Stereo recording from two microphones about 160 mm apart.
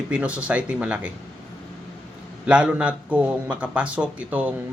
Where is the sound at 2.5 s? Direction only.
5° right (ahead or behind).